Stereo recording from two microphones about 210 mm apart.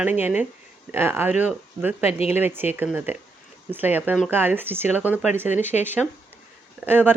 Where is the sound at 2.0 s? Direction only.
30° left (ahead or behind).